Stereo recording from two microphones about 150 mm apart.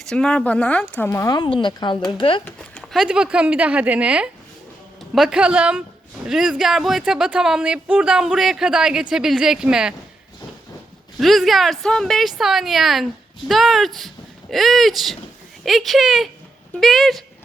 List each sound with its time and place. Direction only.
0.0 s speech: 5° left (ahead or behind)
1.4 s speech: 30° left (ahead or behind)
2.4 s speech: 10° left (ahead or behind)
2.9 s speech: 5° right (ahead or behind)
11.2 s speech: centre (ahead or behind)